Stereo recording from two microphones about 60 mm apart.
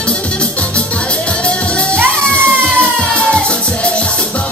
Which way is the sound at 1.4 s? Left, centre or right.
Centre.